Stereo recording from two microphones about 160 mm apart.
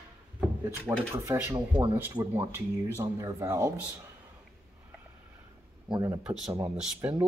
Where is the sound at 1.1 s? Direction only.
15° right (ahead or behind).